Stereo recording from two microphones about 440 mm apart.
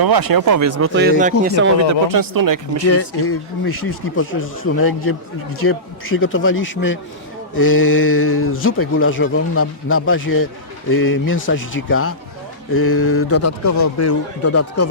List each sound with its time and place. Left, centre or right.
0.0 s speech: right
1.9 s speech: right
2.8 s a man's voice: left